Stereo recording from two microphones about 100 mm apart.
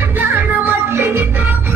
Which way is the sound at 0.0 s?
20° right (ahead or behind).